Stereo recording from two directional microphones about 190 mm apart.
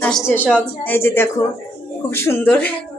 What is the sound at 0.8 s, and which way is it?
A woman's voice, 10° left (ahead or behind).